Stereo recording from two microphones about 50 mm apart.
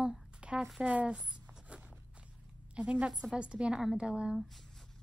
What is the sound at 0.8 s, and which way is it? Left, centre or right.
Speech, right.